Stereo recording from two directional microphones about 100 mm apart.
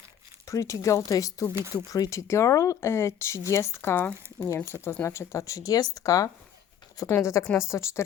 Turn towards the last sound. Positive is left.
turn(degrees=30)  # may be behind; listen again after turning